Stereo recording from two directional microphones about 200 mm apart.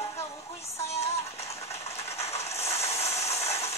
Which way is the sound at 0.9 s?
30° left (ahead or behind).